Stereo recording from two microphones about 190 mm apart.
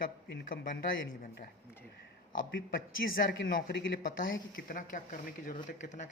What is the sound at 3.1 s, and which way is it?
Speech, 50° left (ahead or behind).